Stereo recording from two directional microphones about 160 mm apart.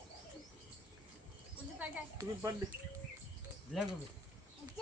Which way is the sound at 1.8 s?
20° right (ahead or behind).